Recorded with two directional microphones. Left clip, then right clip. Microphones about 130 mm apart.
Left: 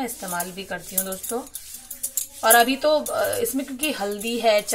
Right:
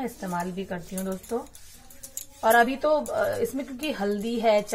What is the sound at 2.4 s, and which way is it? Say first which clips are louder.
Speech: left 3 dB; 20° left (ahead or behind).